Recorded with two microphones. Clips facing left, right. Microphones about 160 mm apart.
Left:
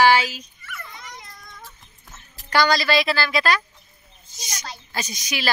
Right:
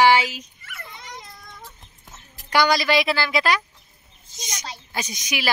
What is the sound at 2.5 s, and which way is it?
Speech, 15° right (ahead or behind).